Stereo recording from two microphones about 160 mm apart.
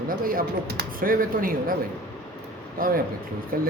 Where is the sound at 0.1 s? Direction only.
65° right (ahead or behind).